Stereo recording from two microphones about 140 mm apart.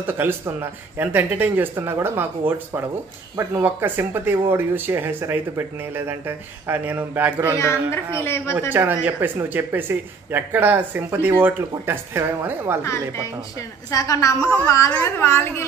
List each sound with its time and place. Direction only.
0.0 s speech: 15° right (ahead or behind)
7.5 s a woman's voice: 20° left (ahead or behind)
8.5 s speech: 15° right (ahead or behind)
13.8 s a woman's voice: 25° left (ahead or behind)